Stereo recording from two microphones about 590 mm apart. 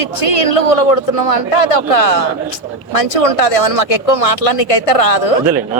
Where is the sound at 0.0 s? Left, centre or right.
Left.